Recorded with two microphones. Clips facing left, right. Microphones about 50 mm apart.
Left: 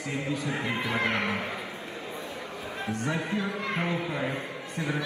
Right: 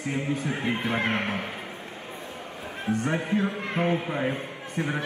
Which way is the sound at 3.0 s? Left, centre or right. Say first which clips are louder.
Right 3 dB; right.